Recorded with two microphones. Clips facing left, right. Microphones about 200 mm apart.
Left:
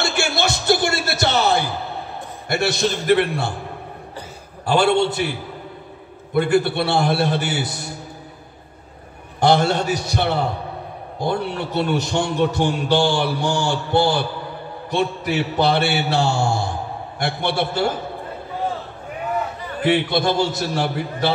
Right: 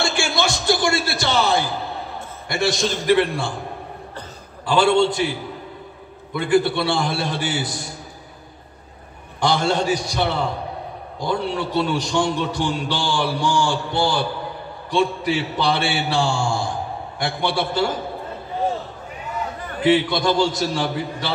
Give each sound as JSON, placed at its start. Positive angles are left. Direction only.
{"t": 0.0, "sound": "music", "side_deg": 60}
{"t": 2.5, "sound": "a man's voice", "side_deg": 60}
{"t": 4.6, "sound": "a man's voice", "side_deg": 60}
{"t": 6.3, "sound": "a man's voice", "side_deg": 60}
{"t": 9.4, "sound": "a man's voice", "side_deg": 60}
{"t": 19.9, "sound": "a man's voice", "side_deg": 60}